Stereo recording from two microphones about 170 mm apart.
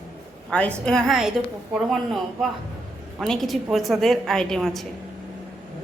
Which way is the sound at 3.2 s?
Centre (ahead or behind).